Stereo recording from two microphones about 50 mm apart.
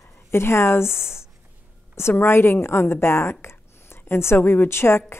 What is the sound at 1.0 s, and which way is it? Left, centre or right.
A woman's voice, left.